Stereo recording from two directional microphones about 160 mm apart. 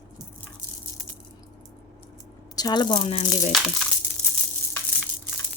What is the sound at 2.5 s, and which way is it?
Speech, 25° left (ahead or behind).